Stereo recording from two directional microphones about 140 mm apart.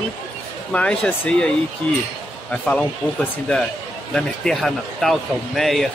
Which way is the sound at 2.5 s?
5° left (ahead or behind).